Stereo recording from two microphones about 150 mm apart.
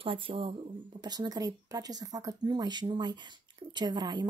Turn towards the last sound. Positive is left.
turn(degrees=-30)  # may be behind; listen again after turning